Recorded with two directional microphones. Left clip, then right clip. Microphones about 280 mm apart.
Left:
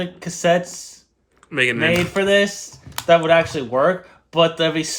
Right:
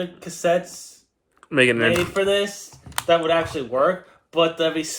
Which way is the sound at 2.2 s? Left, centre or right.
Left.